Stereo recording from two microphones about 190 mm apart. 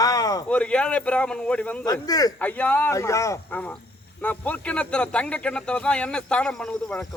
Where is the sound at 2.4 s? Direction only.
10° left (ahead or behind).